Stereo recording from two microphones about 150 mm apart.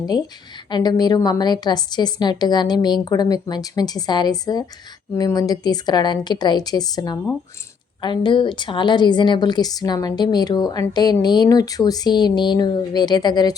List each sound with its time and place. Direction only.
0.7 s a woman's voice: 25° left (ahead or behind)